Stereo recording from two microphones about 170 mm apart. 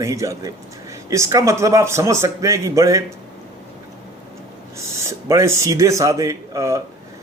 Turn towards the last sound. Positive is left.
turn(degrees=-20)  # may be behind; listen again after turning